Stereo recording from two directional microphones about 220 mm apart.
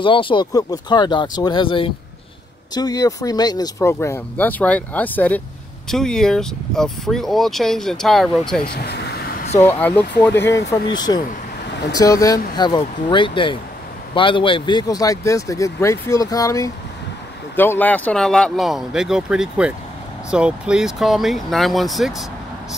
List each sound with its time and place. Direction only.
0.0 s speech: 20° left (ahead or behind); by 8.6 s centre (ahead or behind)
8.7 s vehicle: 50° left (ahead or behind)
9.7 s speech: 5° left (ahead or behind)